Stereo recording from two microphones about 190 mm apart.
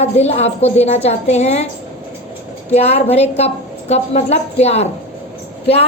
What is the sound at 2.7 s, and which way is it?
A man's voice, 35° left (ahead or behind).